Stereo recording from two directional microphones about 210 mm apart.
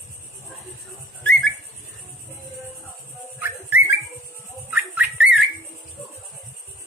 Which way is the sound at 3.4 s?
10° right (ahead or behind).